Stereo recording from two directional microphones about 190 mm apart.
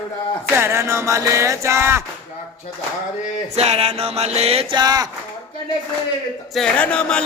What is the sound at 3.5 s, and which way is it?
Mantra, 35° right (ahead or behind).